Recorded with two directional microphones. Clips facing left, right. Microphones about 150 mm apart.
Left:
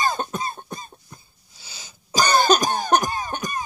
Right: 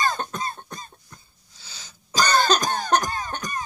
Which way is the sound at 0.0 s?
10° left (ahead or behind).